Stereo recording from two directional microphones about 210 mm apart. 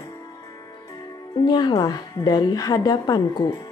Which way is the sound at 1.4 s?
20° left (ahead or behind).